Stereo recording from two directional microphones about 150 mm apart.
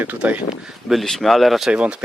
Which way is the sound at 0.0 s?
10° right (ahead or behind).